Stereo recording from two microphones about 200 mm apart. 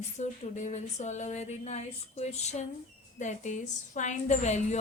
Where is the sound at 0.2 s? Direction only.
35° left (ahead or behind).